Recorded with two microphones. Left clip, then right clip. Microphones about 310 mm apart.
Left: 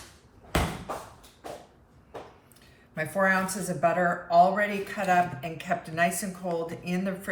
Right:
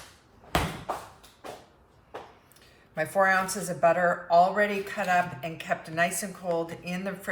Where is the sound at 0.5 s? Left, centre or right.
Right.